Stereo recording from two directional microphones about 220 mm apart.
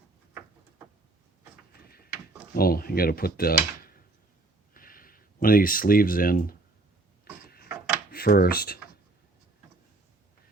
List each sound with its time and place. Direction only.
2.6 s speech: 40° left (ahead or behind)
4.7 s a sound: 40° left (ahead or behind)
7.4 s mechanisms: 45° left (ahead or behind)
8.1 s speech: 45° left (ahead or behind)